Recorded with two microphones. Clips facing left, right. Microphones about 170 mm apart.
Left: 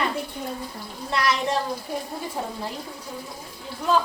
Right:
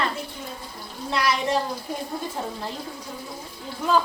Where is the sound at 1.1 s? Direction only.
Centre (ahead or behind).